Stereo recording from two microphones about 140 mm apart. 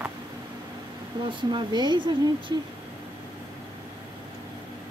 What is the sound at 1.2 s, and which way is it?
Speech, 30° right (ahead or behind).